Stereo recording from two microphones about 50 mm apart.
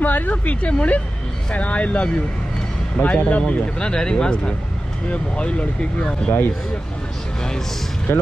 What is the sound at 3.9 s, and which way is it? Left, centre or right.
Speech, centre.